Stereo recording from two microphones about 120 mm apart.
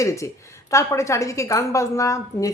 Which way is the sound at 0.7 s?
25° left (ahead or behind).